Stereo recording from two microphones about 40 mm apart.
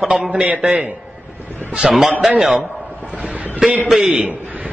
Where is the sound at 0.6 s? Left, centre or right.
Right.